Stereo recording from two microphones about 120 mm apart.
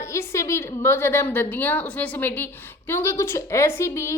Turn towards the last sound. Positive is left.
turn(degrees=25)  # may be behind; listen again after turning